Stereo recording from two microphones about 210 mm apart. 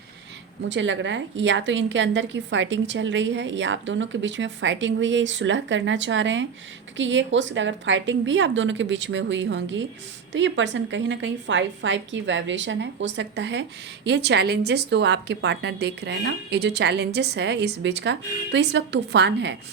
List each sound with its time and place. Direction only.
0.7 s a woman's voice: 60° right (ahead or behind)